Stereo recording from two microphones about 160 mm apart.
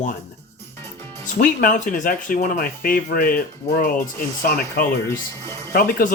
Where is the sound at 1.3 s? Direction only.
55° left (ahead or behind).